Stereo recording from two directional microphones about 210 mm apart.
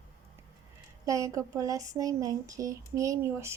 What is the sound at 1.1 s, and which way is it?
Speech, 15° right (ahead or behind).